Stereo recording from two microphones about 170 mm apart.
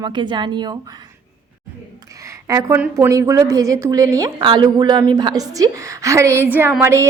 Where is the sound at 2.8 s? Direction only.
15° right (ahead or behind).